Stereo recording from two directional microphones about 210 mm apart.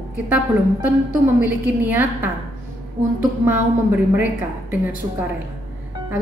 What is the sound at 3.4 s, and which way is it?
Speech, 10° right (ahead or behind).